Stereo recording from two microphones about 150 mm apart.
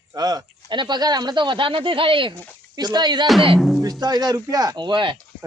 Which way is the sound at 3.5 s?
Centre (ahead or behind).